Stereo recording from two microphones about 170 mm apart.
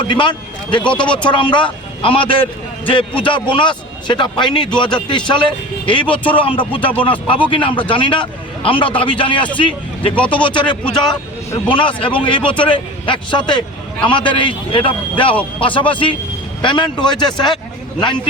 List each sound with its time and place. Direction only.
0.1 s a man's voice: 30° left (ahead or behind)